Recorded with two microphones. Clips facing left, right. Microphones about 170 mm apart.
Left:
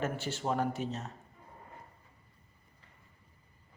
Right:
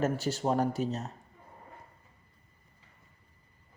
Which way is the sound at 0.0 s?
40° right (ahead or behind).